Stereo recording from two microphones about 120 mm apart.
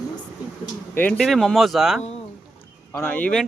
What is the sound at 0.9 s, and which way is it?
Speech, 15° left (ahead or behind).